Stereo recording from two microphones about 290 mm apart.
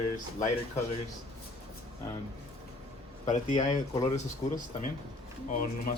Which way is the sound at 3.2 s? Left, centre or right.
Left.